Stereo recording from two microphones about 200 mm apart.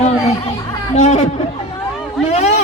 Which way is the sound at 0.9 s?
30° left (ahead or behind).